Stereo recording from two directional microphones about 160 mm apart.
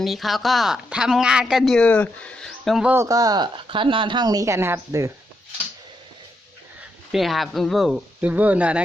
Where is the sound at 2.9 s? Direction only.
20° right (ahead or behind).